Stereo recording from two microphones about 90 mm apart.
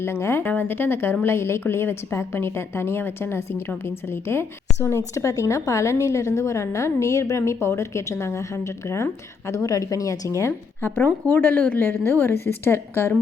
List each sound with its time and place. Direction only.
0.0 s a woman's voice: 30° left (ahead or behind)